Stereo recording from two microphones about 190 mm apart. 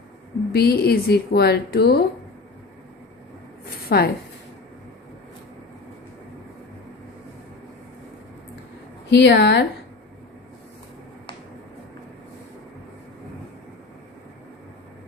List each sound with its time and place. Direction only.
0.5 s a woman's voice: 55° left (ahead or behind)
3.8 s a woman's voice: 50° left (ahead or behind)
9.0 s a woman's voice: 65° left (ahead or behind)